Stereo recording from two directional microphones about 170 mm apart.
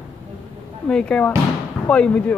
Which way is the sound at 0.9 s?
5° left (ahead or behind).